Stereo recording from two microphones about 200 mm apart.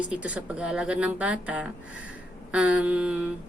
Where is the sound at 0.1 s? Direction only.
5° right (ahead or behind).